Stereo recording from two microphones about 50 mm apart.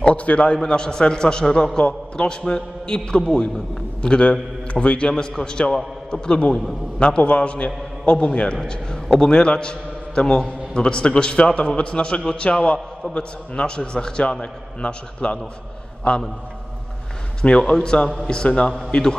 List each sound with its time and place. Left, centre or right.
0.0 s a man's voice: left
17.4 s a man's voice: centre